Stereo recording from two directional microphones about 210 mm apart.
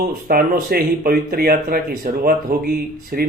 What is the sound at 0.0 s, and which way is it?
Speech, 45° right (ahead or behind).